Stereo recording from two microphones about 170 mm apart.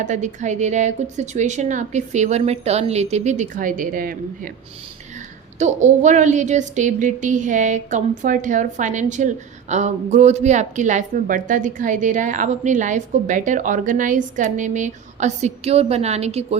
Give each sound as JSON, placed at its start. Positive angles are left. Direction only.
{"t": 0.0, "sound": "speech", "side_deg": -45}
{"t": 5.5, "sound": "speech", "side_deg": -45}